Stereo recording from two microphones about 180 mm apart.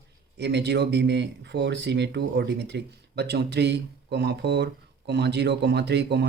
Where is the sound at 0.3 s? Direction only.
70° right (ahead or behind).